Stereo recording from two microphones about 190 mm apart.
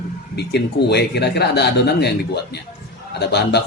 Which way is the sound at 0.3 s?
60° left (ahead or behind).